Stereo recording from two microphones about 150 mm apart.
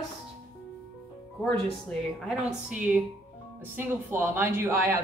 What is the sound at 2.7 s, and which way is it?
A woman's voice, 10° right (ahead or behind).